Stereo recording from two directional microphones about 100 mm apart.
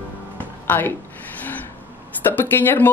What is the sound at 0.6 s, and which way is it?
Speech, 20° left (ahead or behind).